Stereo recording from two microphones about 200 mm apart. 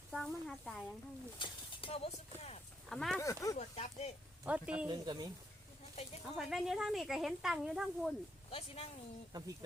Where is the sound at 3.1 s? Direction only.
15° left (ahead or behind).